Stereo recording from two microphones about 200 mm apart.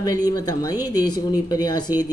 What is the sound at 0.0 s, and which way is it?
Speech, 20° left (ahead or behind).